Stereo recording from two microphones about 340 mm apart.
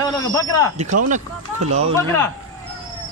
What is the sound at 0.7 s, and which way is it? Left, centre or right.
Speech, right.